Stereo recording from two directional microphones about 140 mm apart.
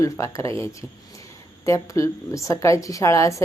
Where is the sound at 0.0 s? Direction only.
20° left (ahead or behind).